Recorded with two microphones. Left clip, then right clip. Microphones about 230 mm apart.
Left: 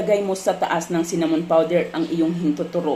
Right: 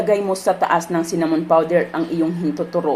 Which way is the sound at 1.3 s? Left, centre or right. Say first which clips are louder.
Right 2 dB; right.